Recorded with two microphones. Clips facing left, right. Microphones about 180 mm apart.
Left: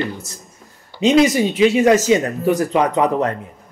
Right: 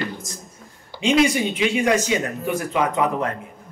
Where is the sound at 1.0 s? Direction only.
40° left (ahead or behind).